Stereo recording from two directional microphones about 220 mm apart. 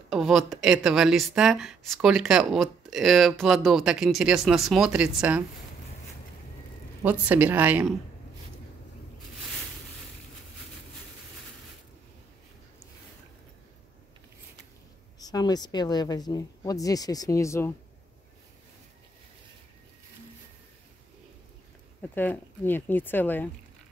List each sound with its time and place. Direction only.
0.1 s speech: centre (ahead or behind)
7.0 s a woman's voice: 10° right (ahead or behind)
15.1 s a woman's voice: 15° left (ahead or behind)
22.1 s a woman's voice: 10° left (ahead or behind)